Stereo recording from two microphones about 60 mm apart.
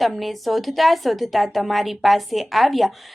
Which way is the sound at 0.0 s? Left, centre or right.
Centre.